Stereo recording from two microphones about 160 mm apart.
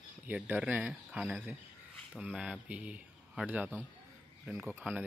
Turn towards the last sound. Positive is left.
turn(degrees=-10)  # may be behind; listen again after turning